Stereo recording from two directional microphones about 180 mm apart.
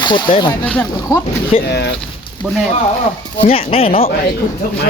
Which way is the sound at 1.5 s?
35° left (ahead or behind).